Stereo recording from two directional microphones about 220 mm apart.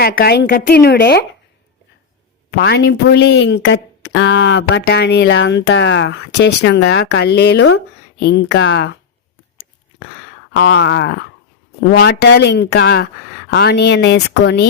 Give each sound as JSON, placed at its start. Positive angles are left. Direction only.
{"t": 0.0, "sound": "speech", "side_deg": 45}
{"t": 2.5, "sound": "speech", "side_deg": 50}
{"t": 10.6, "sound": "speech", "side_deg": 50}